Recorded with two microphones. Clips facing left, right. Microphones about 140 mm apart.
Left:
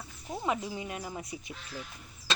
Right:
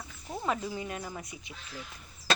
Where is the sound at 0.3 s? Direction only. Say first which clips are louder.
Even; 15° left (ahead or behind).